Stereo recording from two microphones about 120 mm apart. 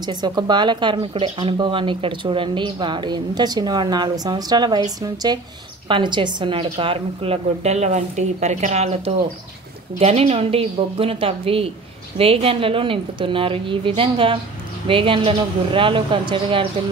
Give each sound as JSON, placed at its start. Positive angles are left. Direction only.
{"t": 0.0, "sound": "speech", "side_deg": -35}
{"t": 1.1, "sound": "speech", "side_deg": -50}
{"t": 5.9, "sound": "a woman's voice", "side_deg": -40}